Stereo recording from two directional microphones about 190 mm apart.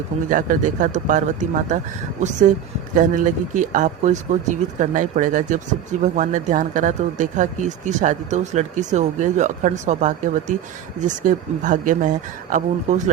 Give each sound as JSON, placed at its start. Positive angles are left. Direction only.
{"t": 0.3, "sound": "speech", "side_deg": -45}
{"t": 2.9, "sound": "speech", "side_deg": -45}